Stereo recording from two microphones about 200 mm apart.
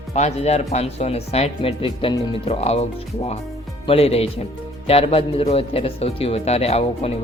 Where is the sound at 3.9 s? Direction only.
30° left (ahead or behind).